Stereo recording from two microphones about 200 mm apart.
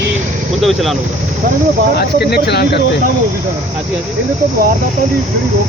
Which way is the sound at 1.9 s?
55° left (ahead or behind).